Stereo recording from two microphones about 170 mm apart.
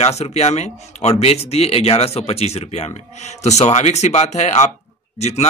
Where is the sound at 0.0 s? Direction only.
40° left (ahead or behind).